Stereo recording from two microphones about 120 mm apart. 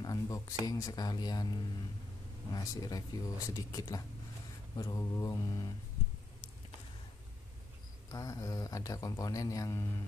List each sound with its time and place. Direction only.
0.0 s speech: 30° left (ahead or behind)
8.1 s speech: 30° left (ahead or behind)